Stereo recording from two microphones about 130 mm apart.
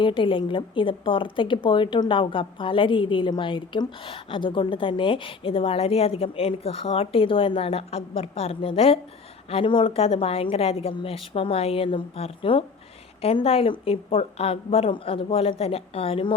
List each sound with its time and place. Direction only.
0.0 s a woman's voice: 40° left (ahead or behind)